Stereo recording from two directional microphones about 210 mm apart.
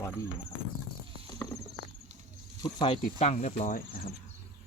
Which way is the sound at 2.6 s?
25° left (ahead or behind).